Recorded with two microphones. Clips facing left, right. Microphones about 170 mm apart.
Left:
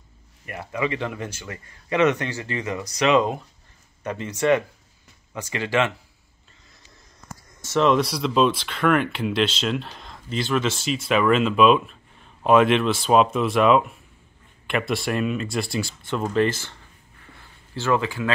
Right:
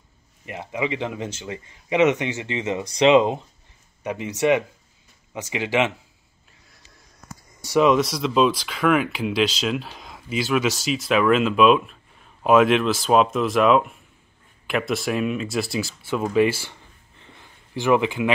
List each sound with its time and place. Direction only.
0.5 s speech: 15° right (ahead or behind)
7.6 s speech: 10° right (ahead or behind)
17.2 s a sound: 15° right (ahead or behind)